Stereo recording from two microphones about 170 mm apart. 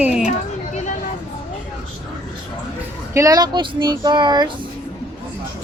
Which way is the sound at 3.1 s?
20° right (ahead or behind).